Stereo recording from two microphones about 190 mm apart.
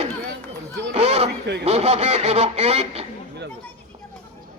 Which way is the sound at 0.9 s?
35° right (ahead or behind).